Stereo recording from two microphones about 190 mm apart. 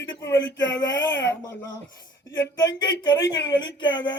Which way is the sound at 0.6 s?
70° left (ahead or behind).